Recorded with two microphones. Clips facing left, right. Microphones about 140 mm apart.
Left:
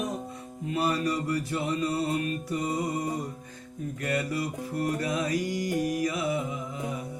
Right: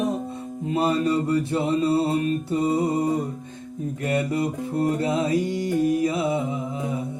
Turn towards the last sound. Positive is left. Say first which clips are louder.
# right 6 dB
turn(degrees=-25)  # may be behind; listen again after turning